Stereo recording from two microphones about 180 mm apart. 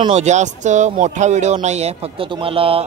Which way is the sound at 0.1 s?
40° right (ahead or behind).